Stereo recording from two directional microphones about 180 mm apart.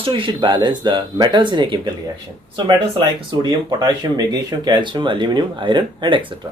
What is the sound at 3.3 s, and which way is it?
Speech, 25° right (ahead or behind).